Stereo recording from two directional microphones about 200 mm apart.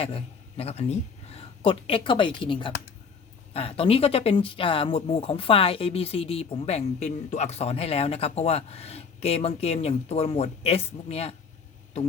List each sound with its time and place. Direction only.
0.0 s speech: 30° left (ahead or behind)